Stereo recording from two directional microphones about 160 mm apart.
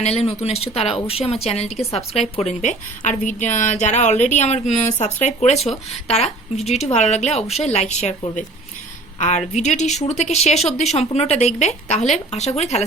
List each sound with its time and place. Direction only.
0.0 s speech: 40° left (ahead or behind)
9.1 s a woman's voice: 45° left (ahead or behind)